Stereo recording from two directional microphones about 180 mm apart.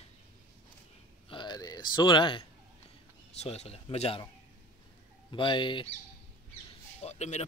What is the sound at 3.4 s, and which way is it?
Speech, 35° left (ahead or behind).